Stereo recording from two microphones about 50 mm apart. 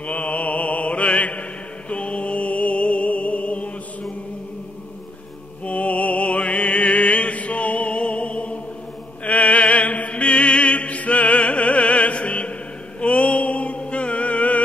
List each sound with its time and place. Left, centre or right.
0.0 s mantra: left
1.9 s music: left
5.7 s music: left
13.0 s mantra: left